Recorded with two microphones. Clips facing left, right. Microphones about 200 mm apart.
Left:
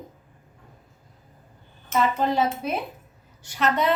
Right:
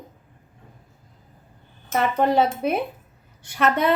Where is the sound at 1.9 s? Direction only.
60° right (ahead or behind).